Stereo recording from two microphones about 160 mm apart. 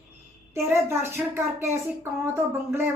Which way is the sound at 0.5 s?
15° right (ahead or behind).